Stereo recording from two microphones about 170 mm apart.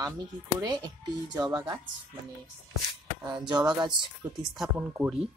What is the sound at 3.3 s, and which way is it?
Speech, 25° right (ahead or behind).